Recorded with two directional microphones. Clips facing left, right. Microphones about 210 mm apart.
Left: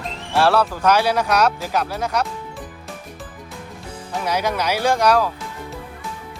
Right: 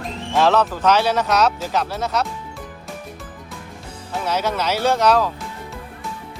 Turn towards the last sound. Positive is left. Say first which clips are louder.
# even
turn(degrees=10)  # may be behind; listen again after turning